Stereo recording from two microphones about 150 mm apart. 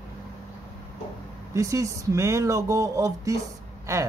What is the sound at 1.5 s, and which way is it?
Speech, 20° right (ahead or behind).